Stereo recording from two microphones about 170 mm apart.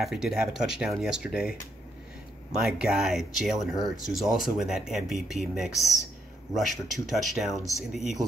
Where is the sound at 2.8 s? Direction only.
Centre (ahead or behind).